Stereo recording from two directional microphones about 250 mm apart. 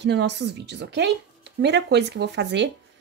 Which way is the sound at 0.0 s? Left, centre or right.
Right.